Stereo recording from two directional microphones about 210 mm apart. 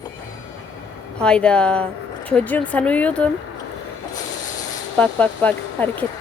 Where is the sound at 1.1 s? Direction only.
5° left (ahead or behind).